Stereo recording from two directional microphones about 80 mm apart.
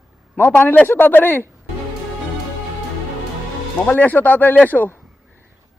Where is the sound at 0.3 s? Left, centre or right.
Left.